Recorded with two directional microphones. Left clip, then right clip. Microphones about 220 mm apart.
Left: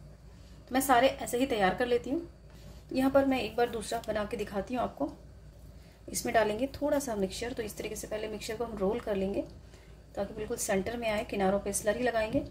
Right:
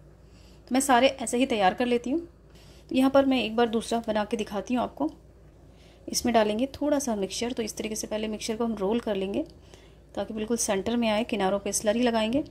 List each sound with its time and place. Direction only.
0.7 s a woman's voice: 40° right (ahead or behind)
6.2 s a woman's voice: 35° right (ahead or behind)